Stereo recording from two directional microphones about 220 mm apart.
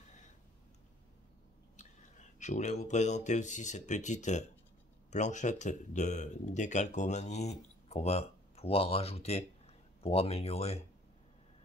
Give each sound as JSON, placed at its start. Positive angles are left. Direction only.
{"t": 1.8, "sound": "speech", "side_deg": 35}